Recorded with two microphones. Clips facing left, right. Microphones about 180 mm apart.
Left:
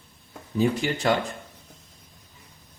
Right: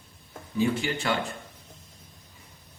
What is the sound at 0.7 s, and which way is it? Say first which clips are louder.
Speech: left 4 dB; 35° left (ahead or behind).